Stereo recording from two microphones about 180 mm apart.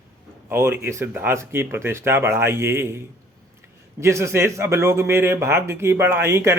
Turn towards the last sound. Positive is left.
turn(degrees=-15)  # may be behind; listen again after turning